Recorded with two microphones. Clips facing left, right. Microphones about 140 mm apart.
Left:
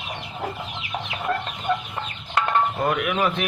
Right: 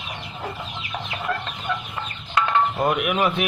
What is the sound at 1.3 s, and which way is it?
Chicken, 15° left (ahead or behind).